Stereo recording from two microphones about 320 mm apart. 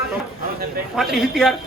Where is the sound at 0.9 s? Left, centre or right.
Centre.